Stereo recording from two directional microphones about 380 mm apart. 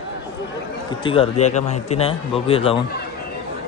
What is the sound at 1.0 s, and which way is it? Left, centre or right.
A man's voice, centre.